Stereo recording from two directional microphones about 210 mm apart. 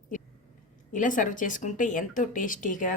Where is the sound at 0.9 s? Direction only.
40° left (ahead or behind).